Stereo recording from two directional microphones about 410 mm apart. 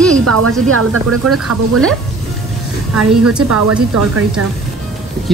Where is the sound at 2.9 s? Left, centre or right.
Centre.